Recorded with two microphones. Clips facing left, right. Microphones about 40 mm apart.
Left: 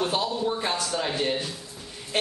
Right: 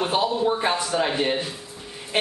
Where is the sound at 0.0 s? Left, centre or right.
Right.